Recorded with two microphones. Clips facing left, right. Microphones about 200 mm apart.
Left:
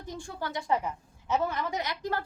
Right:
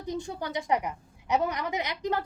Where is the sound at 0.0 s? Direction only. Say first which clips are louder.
Right 4 dB; 20° right (ahead or behind).